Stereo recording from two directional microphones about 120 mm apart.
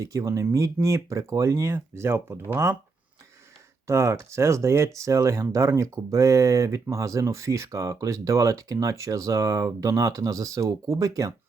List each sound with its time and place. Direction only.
0.0 s speech: 25° right (ahead or behind)
3.8 s speech: 25° right (ahead or behind)